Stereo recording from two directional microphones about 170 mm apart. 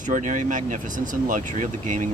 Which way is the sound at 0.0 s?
50° right (ahead or behind).